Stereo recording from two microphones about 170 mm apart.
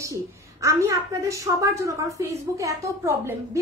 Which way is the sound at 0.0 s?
20° right (ahead or behind).